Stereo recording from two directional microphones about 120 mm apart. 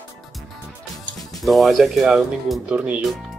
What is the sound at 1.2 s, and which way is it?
Speech, centre (ahead or behind).